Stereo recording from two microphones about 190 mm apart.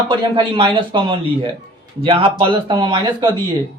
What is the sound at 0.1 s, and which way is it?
Speech, 25° right (ahead or behind).